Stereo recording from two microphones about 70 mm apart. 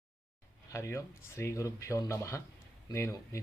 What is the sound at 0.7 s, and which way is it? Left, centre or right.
Speech, left.